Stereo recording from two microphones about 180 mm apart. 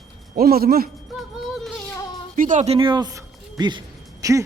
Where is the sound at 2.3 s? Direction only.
45° right (ahead or behind).